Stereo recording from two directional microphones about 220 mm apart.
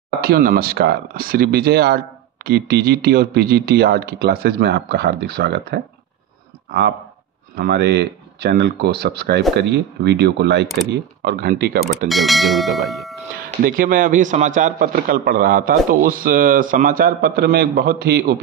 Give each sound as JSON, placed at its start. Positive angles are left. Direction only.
{"t": 0.2, "sound": "speech", "side_deg": -45}
{"t": 7.5, "sound": "speech", "side_deg": -45}
{"t": 12.1, "sound": "speech", "side_deg": 0}
{"t": 13.4, "sound": "a man's voice", "side_deg": -40}